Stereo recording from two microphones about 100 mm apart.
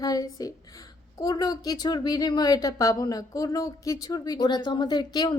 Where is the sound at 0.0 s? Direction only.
40° left (ahead or behind).